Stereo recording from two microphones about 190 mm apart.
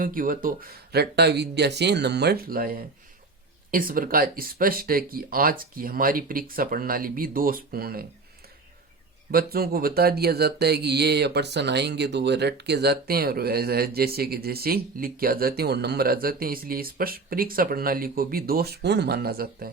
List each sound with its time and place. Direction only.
0.0 s speech: 45° right (ahead or behind)
9.3 s speech: 55° right (ahead or behind)